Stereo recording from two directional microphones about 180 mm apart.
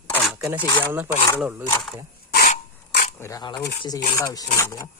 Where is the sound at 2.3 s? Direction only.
55° left (ahead or behind).